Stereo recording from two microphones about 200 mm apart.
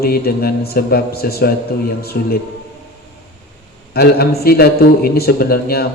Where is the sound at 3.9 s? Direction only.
50° left (ahead or behind).